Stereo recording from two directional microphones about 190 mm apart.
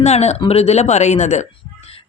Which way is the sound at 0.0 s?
35° left (ahead or behind).